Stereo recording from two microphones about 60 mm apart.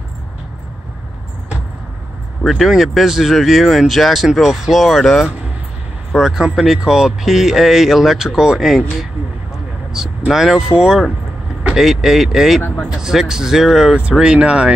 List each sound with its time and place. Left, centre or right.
2.4 s speech: centre
9.9 s speech: centre
14.2 s speech: centre